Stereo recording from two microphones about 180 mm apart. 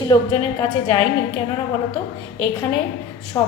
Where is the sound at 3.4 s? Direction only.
20° left (ahead or behind).